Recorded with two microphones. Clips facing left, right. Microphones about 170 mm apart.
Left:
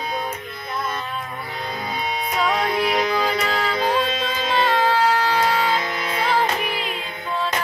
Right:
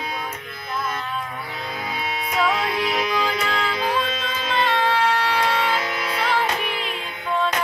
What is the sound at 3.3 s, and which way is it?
Music, 35° left (ahead or behind).